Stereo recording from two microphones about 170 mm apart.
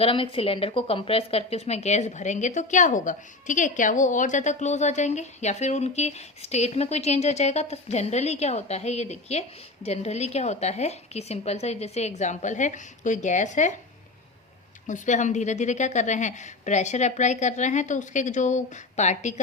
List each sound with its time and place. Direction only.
0.0 s speech: 30° left (ahead or behind)
14.8 s a woman's voice: 45° left (ahead or behind)